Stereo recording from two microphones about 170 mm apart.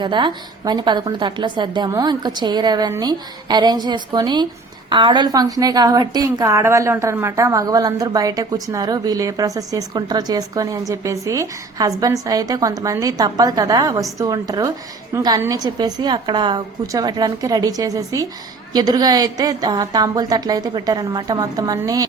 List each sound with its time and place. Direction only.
0.0 s a woman's voice: 25° right (ahead or behind)